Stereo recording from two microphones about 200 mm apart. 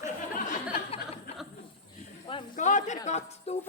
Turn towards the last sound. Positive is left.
turn(degrees=35)  # may be behind; listen again after turning